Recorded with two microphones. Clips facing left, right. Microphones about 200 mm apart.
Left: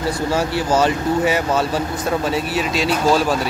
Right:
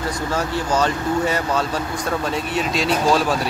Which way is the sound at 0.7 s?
5° left (ahead or behind).